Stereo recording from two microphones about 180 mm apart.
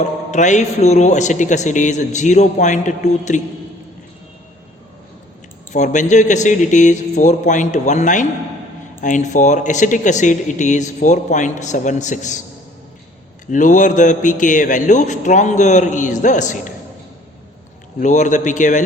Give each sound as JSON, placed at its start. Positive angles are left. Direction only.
{"t": 0.0, "sound": "speech", "side_deg": 40}
{"t": 5.7, "sound": "speech", "side_deg": 40}
{"t": 13.5, "sound": "speech", "side_deg": 45}
{"t": 18.0, "sound": "speech", "side_deg": 45}